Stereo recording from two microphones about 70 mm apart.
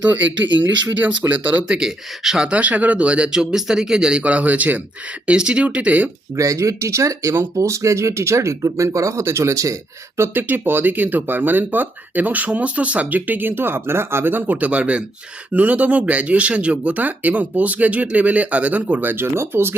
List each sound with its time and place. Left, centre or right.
0.0 s speech: right
0.9 s speech: right
1.3 s speech: right
2.5 s speech: right
6.3 s speech: right
10.2 s speech: right